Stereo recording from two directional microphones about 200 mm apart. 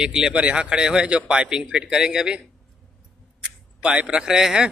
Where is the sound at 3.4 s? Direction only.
5° right (ahead or behind).